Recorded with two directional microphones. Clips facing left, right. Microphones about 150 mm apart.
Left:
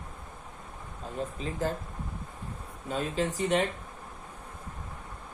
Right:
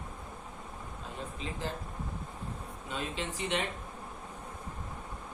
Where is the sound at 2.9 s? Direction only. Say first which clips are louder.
Left 7 dB; 40° left (ahead or behind).